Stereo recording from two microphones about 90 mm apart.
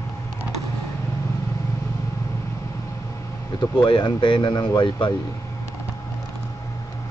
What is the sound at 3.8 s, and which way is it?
Speech, 60° left (ahead or behind).